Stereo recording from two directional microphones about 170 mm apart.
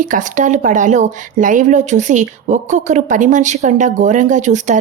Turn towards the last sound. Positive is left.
turn(degrees=-45)  # may be behind; listen again after turning